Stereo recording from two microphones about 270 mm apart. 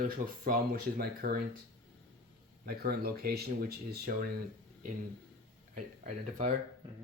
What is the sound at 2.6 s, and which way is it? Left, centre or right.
Speech, right.